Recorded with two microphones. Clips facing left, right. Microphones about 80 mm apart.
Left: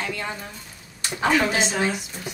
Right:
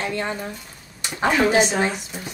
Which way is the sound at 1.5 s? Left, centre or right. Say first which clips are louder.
Right 4 dB; right.